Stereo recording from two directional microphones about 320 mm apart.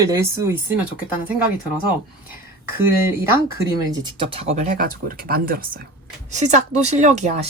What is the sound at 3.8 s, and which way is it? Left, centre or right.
Speech, centre.